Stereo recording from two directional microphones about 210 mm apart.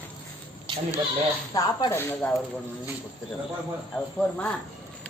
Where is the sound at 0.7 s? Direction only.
25° right (ahead or behind).